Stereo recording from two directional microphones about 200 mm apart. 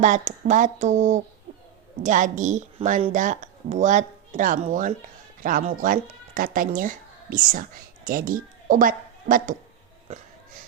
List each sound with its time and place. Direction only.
0.0 s speech: 40° right (ahead or behind)